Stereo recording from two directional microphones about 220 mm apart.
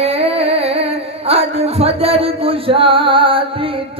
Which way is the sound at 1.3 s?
30° right (ahead or behind).